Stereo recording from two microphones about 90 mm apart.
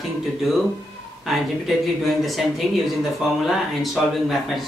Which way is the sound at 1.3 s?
5° right (ahead or behind).